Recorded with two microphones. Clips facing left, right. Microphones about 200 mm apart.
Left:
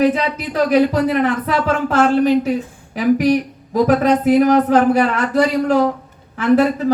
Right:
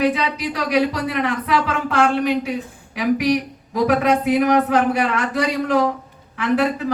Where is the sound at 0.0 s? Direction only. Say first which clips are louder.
Left 3 dB; 45° left (ahead or behind).